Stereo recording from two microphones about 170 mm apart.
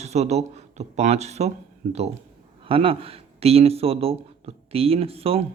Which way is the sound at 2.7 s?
30° right (ahead or behind).